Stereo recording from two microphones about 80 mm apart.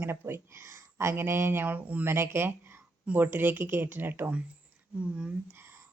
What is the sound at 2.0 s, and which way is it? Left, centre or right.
Speech, right.